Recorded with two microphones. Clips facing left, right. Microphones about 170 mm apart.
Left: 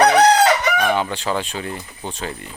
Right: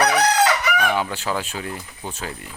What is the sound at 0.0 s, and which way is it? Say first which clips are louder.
Chicken: left 5 dB; 30° left (ahead or behind).